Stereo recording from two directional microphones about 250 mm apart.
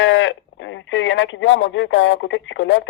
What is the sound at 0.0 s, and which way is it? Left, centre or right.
Speech, left.